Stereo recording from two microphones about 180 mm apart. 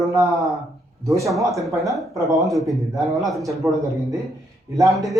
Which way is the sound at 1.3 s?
Centre (ahead or behind).